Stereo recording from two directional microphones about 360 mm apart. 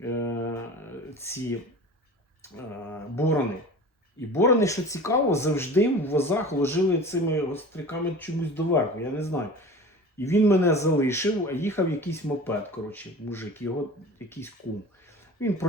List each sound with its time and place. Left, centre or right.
0.0 s mantra: centre
1.2 s speech: centre
3.2 s speech: centre
15.4 s speech: centre